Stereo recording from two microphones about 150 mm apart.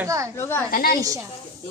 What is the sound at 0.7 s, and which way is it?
Speech, 70° left (ahead or behind).